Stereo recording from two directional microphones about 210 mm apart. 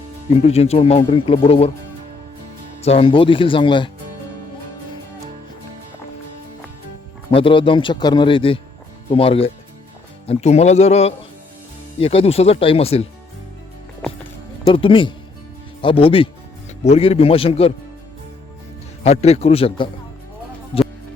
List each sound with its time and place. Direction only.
0.4 s speech: 30° left (ahead or behind)
2.8 s speech: 25° left (ahead or behind)
7.3 s speech: 25° left (ahead or behind)
14.6 s speech: 25° left (ahead or behind)
19.0 s speech: 30° left (ahead or behind)
20.7 s music: 25° left (ahead or behind)